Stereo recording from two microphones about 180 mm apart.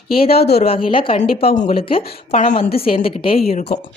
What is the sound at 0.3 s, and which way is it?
Speech, 60° left (ahead or behind).